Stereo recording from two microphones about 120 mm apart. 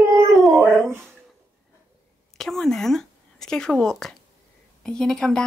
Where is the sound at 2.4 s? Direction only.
5° left (ahead or behind).